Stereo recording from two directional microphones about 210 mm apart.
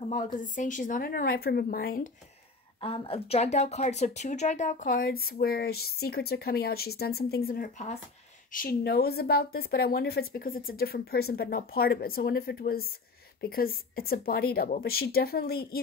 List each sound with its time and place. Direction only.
0.4 s speech: 40° left (ahead or behind)
2.8 s speech: 25° left (ahead or behind)
8.5 s speech: 45° left (ahead or behind)